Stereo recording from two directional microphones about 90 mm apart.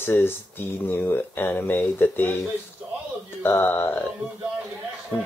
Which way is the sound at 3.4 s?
25° left (ahead or behind).